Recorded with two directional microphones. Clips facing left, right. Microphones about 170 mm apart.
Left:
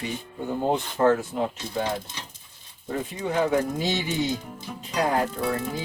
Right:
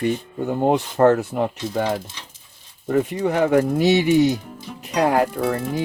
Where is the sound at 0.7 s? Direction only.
65° right (ahead or behind).